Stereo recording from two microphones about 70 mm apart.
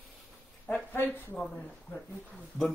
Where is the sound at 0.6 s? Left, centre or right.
Left.